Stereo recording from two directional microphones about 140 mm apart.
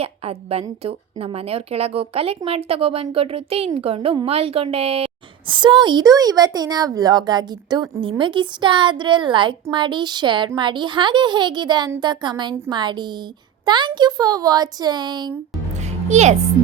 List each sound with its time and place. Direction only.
0.0 s a woman's voice: 45° right (ahead or behind)
15.8 s music: 55° right (ahead or behind)